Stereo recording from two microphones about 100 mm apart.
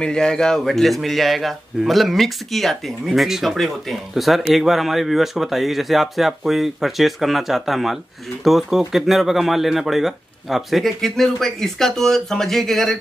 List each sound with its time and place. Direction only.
0.0 s speech: 10° left (ahead or behind)